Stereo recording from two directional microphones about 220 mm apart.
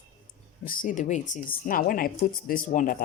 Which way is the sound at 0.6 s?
35° left (ahead or behind).